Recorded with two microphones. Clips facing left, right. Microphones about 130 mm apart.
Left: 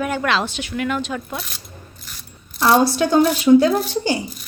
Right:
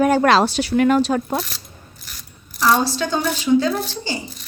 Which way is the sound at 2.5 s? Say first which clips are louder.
Left 2 dB; 65° left (ahead or behind).